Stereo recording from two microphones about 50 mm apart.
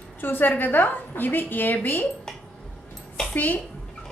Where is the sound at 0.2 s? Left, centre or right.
Left.